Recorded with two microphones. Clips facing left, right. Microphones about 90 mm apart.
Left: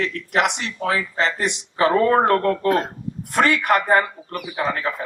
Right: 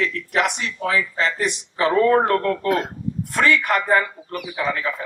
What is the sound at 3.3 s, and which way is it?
Speech, 55° left (ahead or behind).